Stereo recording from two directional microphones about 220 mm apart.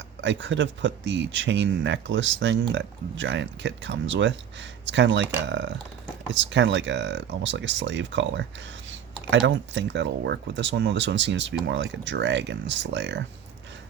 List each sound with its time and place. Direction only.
0.2 s speech: 55° right (ahead or behind)